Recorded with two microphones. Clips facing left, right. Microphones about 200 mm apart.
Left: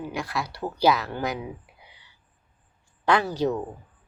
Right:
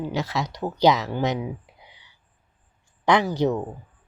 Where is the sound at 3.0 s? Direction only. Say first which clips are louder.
Right 2 dB; 15° right (ahead or behind).